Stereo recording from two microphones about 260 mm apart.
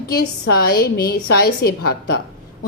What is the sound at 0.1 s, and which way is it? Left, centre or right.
A woman's voice, left.